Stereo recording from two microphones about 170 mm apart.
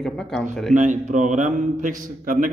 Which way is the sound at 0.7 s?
45° right (ahead or behind).